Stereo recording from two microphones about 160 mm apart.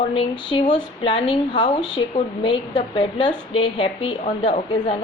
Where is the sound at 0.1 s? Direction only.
30° left (ahead or behind).